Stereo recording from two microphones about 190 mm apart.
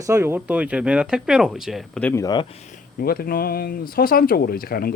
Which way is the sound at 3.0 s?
55° left (ahead or behind).